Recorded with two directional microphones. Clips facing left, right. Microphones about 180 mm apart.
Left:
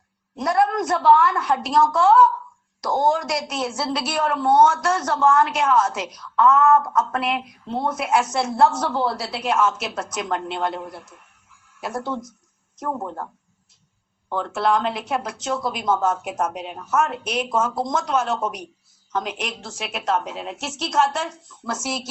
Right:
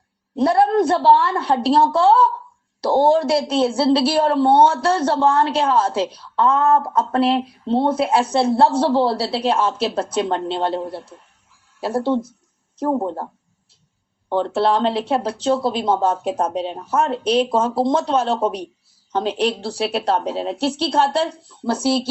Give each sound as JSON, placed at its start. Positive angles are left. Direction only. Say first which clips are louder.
{"t": 0.3, "sound": "speech", "louder": "right 5 dB", "side_deg": -30}
{"t": 14.3, "sound": "speech", "louder": "right 4 dB", "side_deg": -30}